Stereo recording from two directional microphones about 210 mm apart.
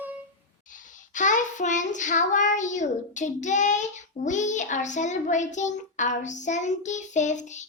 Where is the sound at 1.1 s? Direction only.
35° left (ahead or behind).